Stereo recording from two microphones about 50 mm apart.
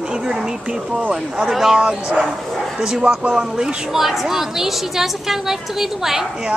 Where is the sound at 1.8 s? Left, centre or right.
Centre.